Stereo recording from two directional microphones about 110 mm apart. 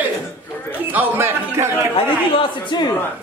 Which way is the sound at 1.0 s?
20° right (ahead or behind).